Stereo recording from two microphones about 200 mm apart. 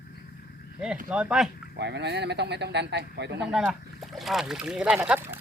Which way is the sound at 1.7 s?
60° right (ahead or behind).